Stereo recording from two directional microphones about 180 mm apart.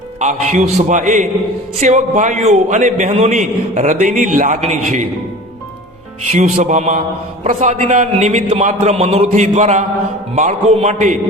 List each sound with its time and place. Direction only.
0.2 s a man's voice: 40° right (ahead or behind)
6.3 s a man's voice: 40° right (ahead or behind)